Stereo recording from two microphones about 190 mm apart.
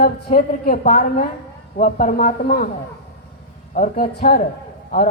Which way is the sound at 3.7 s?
45° left (ahead or behind).